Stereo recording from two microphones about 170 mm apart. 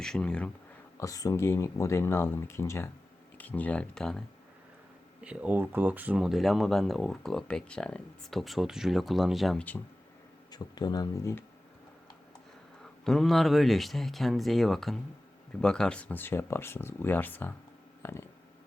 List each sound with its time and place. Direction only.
0.0 s speech: 5° left (ahead or behind)
0.9 s speech: 20° left (ahead or behind); by 4.2 s 5° left (ahead or behind)
5.2 s speech: 5° right (ahead or behind); by 9.8 s 10° left (ahead or behind)
10.5 s speech: 25° left (ahead or behind)
13.1 s speech: centre (ahead or behind)
18.0 s a sound: 15° left (ahead or behind)